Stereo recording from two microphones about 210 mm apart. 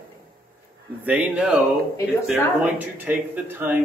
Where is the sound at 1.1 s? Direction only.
5° right (ahead or behind).